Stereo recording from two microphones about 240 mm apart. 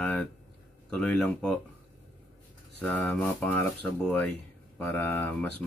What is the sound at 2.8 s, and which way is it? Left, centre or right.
Speech, centre.